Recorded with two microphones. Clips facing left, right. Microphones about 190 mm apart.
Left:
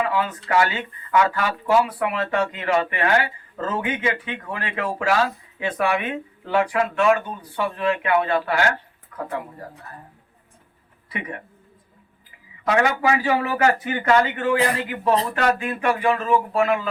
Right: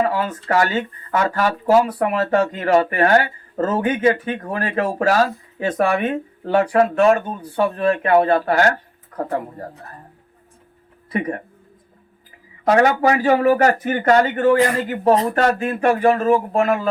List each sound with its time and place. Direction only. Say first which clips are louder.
0.0 s speech: right 3 dB; 40° right (ahead or behind)
11.1 s speech: right 9 dB; 40° right (ahead or behind)
12.6 s speech: right 5 dB; 40° right (ahead or behind)